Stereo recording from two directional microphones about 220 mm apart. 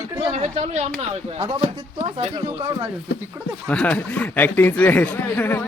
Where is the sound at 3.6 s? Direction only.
5° left (ahead or behind).